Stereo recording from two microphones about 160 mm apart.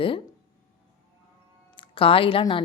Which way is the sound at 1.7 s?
35° left (ahead or behind).